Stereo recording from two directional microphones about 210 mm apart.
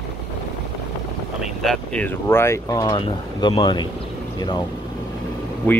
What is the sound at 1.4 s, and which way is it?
Speech, centre (ahead or behind).